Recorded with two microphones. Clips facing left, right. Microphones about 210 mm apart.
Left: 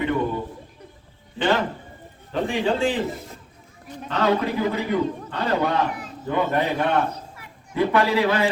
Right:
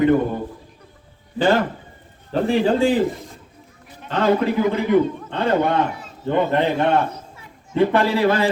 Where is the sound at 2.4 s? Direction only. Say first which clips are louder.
Right 5 dB; 35° right (ahead or behind).